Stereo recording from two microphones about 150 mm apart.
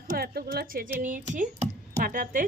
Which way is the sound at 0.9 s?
60° right (ahead or behind).